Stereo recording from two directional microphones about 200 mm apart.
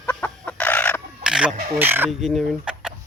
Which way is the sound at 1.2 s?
5° right (ahead or behind).